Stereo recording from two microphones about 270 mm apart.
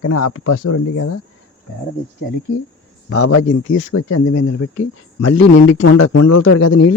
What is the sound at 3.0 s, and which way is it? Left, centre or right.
A man's voice, left.